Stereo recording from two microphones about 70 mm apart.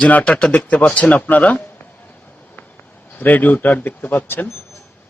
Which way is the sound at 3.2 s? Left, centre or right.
Left.